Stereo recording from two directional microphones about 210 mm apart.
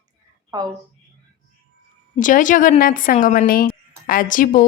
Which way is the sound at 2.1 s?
40° left (ahead or behind).